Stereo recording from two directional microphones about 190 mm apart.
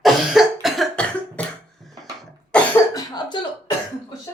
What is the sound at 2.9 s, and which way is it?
Cough, 20° left (ahead or behind).